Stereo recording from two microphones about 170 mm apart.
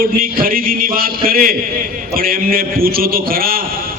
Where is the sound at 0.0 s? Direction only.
60° right (ahead or behind).